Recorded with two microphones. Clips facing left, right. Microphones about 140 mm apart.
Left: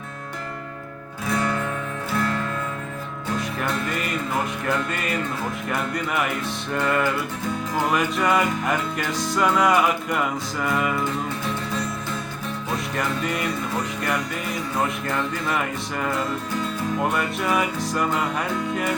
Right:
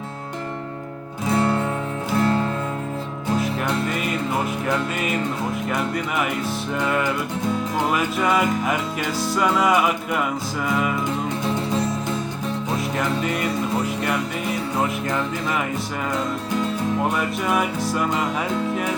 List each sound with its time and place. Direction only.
1.3 s music: 25° right (ahead or behind)
3.8 s music: centre (ahead or behind)
12.7 s music: centre (ahead or behind)
14.8 s music: 5° right (ahead or behind)
17.0 s music: centre (ahead or behind)